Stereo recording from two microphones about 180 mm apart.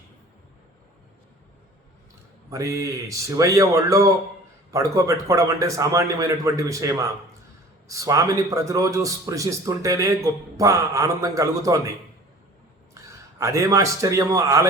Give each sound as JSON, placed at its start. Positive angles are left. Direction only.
{"t": 2.5, "sound": "a man's voice", "side_deg": -15}